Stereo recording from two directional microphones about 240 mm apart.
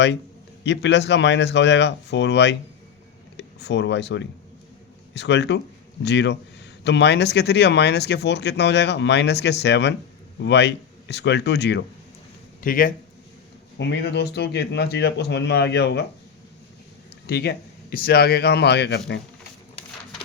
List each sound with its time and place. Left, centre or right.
0.6 s speech: left
13.7 s speech: left
17.2 s speech: left